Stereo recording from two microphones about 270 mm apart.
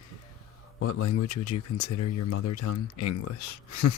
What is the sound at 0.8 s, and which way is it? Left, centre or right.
Speech, left.